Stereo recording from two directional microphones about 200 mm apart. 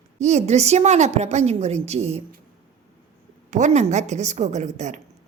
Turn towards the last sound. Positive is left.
turn(degrees=-35)  # may be behind; listen again after turning